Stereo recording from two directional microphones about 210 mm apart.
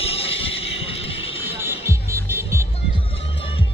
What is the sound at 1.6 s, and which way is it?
Music, 10° right (ahead or behind).